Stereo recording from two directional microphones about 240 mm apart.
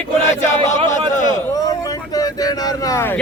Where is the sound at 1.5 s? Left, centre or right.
Centre.